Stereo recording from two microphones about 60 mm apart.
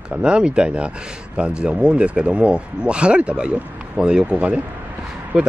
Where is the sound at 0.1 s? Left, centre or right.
Centre.